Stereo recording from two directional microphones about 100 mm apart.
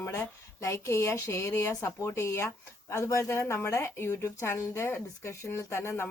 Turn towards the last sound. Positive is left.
turn(degrees=25)  # may be behind; listen again after turning